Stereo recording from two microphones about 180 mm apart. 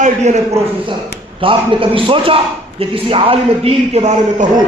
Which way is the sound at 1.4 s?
30° right (ahead or behind).